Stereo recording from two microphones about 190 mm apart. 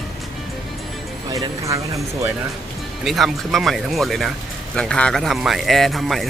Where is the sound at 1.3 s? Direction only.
20° right (ahead or behind).